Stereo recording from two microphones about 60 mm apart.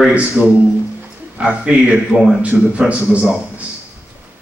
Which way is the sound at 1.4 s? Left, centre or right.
Right.